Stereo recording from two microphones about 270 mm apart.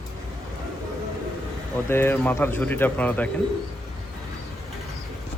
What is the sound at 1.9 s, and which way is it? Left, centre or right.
Speech, centre.